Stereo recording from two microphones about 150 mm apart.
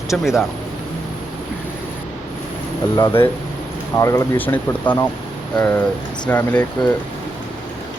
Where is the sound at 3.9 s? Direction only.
20° left (ahead or behind).